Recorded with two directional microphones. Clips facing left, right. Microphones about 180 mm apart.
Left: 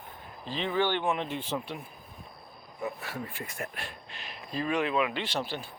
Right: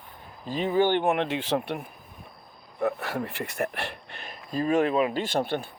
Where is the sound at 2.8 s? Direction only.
70° right (ahead or behind).